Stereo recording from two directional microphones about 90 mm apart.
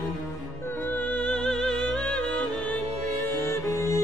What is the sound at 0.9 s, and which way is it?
Music, 15° left (ahead or behind).